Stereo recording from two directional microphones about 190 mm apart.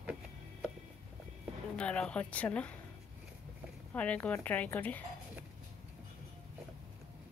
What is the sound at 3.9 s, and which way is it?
A woman's voice, 10° left (ahead or behind).